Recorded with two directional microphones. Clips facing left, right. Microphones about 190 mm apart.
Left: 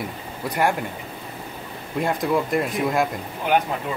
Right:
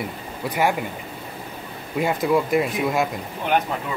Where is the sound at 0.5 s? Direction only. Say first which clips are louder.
Even; centre (ahead or behind).